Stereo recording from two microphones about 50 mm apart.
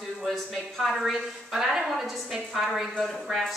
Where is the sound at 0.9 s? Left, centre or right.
Centre.